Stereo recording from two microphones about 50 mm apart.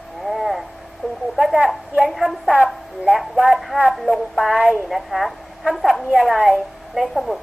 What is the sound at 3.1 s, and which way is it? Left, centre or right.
Speech, centre.